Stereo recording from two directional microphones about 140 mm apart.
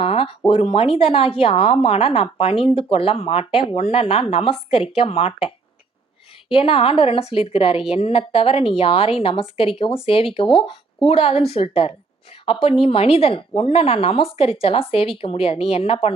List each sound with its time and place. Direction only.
0.0 s speech: 40° left (ahead or behind)
6.5 s speech: 40° left (ahead or behind)